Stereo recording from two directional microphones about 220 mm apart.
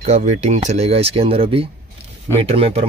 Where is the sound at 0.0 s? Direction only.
30° right (ahead or behind).